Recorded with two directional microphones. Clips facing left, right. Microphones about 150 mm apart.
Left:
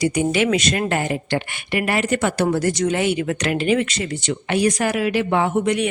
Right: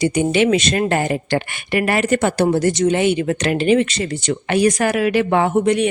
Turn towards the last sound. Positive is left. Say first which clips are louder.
# right 4 dB
turn(degrees=-30)  # may be behind; listen again after turning